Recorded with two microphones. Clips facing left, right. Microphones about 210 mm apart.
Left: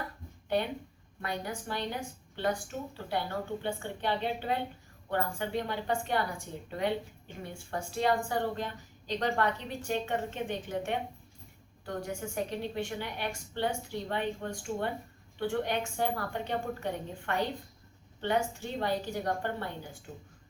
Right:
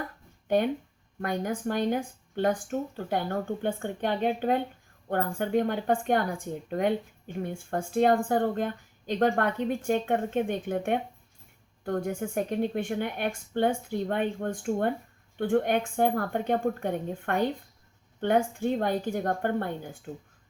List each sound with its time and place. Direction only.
0.4 s a woman's voice: 50° right (ahead or behind)